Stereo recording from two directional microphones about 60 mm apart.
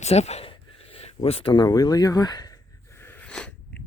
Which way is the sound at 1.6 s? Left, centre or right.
Left.